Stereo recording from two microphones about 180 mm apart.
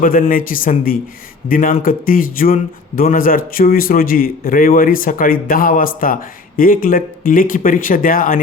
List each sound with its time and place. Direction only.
0.0 s speech: 50° left (ahead or behind)